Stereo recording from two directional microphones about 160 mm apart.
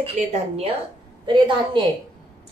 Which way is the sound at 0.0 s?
40° right (ahead or behind).